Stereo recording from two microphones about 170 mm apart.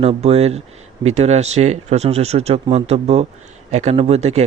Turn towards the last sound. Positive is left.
turn(degrees=-40)  # may be behind; listen again after turning